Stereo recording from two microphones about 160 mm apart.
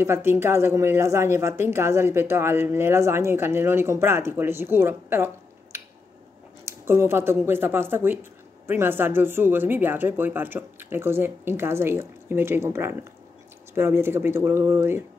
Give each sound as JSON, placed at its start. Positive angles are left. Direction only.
{"t": 0.0, "sound": "speech", "side_deg": -15}